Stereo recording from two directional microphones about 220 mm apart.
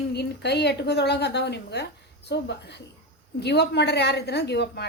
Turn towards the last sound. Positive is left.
turn(degrees=50)  # may be behind; listen again after turning